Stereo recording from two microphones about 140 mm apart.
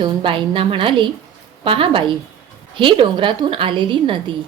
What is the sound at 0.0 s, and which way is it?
A woman's voice, 40° right (ahead or behind).